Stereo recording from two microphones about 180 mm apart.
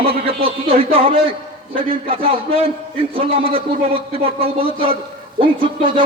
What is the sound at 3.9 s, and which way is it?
A man's voice, 30° right (ahead or behind).